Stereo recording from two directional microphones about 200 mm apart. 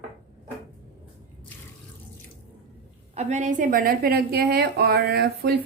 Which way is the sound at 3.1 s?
35° right (ahead or behind).